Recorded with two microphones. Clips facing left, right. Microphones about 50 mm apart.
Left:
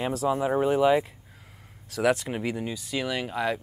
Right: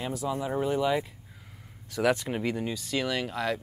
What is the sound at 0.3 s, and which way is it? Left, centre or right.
Speech, left.